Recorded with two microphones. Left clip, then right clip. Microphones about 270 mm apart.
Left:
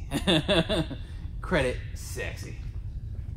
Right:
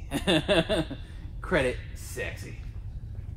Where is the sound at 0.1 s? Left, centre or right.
Centre.